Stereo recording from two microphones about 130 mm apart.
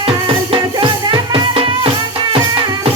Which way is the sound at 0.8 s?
35° right (ahead or behind).